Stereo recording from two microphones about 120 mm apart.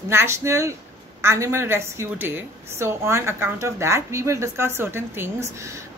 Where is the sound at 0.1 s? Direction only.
20° right (ahead or behind).